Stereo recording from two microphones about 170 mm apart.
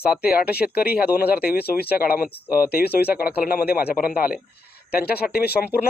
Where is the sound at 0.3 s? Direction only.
65° left (ahead or behind).